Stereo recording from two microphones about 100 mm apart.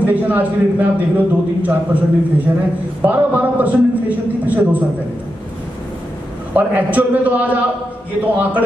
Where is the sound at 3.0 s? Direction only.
15° right (ahead or behind).